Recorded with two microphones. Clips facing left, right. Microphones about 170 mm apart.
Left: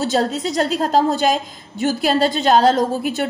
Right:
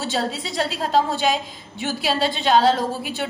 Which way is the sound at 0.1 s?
45° left (ahead or behind).